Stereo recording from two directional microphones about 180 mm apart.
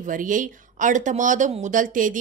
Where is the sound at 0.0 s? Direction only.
50° right (ahead or behind).